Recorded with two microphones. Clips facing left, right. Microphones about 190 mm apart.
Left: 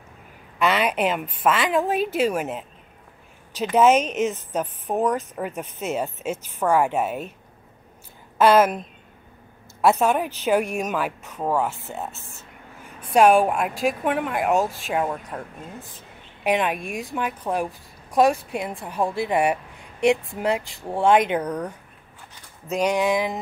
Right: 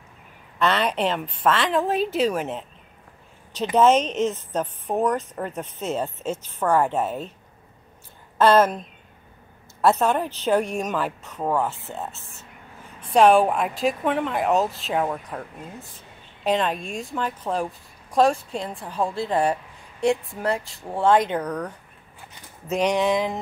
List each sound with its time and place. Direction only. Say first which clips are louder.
0.6 s speech: left 1 dB; 10° left (ahead or behind)
3.7 s speech: even; 5° left (ahead or behind)
8.4 s speech: left 1 dB; 10° left (ahead or behind)
9.8 s speech: left 1 dB; 10° left (ahead or behind)
16.4 s speech: even; 15° left (ahead or behind)